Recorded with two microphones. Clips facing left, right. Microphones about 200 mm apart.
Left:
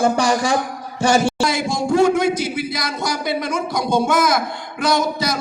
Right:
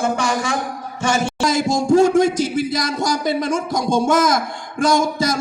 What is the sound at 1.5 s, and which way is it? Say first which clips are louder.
Speech: right 4 dB; 45° right (ahead or behind).